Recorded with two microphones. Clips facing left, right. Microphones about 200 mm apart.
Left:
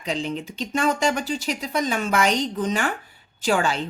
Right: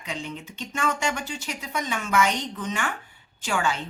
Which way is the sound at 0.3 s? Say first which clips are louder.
Left 7 dB; 35° left (ahead or behind).